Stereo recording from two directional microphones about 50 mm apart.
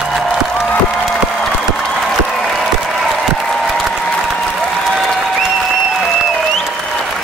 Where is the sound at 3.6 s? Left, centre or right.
Centre.